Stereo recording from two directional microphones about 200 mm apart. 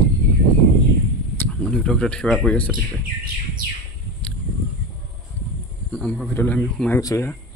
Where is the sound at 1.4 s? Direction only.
5° left (ahead or behind).